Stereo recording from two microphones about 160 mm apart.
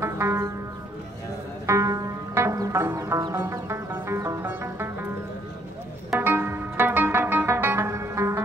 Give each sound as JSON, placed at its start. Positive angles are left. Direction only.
{"t": 0.0, "sound": "music", "side_deg": -15}
{"t": 1.7, "sound": "music", "side_deg": -20}
{"t": 6.1, "sound": "music", "side_deg": -10}